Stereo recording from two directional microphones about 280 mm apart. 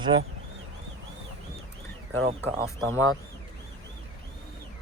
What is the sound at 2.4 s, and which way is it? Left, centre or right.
Speech, centre.